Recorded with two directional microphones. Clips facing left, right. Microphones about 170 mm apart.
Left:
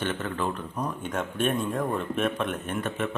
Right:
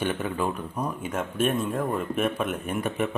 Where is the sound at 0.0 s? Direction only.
15° right (ahead or behind).